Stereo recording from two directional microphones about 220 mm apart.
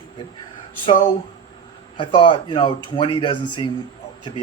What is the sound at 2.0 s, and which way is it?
Speech, 20° left (ahead or behind).